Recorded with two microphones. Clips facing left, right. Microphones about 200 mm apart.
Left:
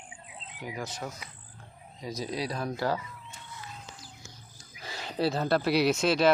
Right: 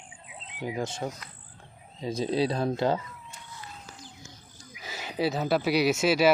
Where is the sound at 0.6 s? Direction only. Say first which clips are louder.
Right 6 dB; 25° right (ahead or behind).